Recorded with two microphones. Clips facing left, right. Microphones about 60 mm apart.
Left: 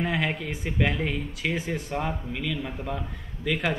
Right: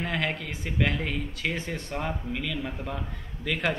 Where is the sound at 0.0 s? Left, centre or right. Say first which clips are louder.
Left 2 dB; centre.